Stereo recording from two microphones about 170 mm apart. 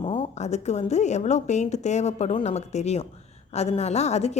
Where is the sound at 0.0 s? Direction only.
35° left (ahead or behind).